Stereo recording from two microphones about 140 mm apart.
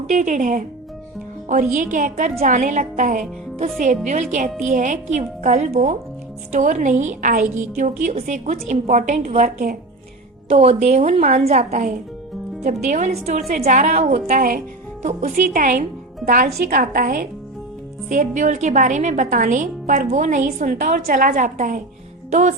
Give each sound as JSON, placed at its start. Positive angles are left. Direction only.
{"t": 0.1, "sound": "a woman's voice", "side_deg": -60}
{"t": 1.7, "sound": "a woman's voice", "side_deg": -60}
{"t": 10.5, "sound": "a woman's voice", "side_deg": -45}
{"t": 14.3, "sound": "speech", "side_deg": -90}
{"t": 15.0, "sound": "a woman's voice", "side_deg": -70}
{"t": 18.1, "sound": "a woman's voice", "side_deg": -65}
{"t": 22.3, "sound": "speech", "side_deg": -60}